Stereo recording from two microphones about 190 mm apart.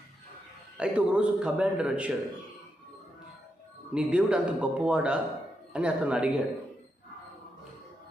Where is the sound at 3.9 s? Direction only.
5° right (ahead or behind).